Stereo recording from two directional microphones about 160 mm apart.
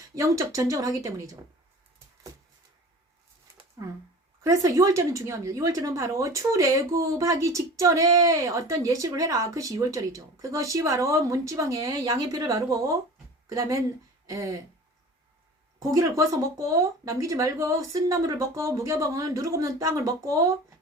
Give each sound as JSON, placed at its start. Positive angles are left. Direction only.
{"t": 0.2, "sound": "a woman's voice", "side_deg": -20}
{"t": 4.4, "sound": "a woman's voice", "side_deg": -20}
{"t": 15.8, "sound": "a woman's voice", "side_deg": -20}